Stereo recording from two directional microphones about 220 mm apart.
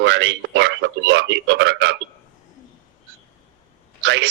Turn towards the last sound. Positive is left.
turn(degrees=-55)  # may be behind; listen again after turning